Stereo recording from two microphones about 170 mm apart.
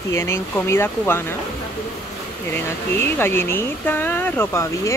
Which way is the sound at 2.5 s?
15° left (ahead or behind).